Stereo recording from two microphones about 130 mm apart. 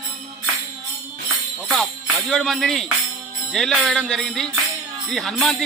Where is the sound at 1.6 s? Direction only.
Centre (ahead or behind).